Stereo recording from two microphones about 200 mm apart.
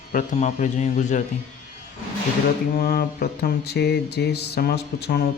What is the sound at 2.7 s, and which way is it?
Mantra, 50° left (ahead or behind).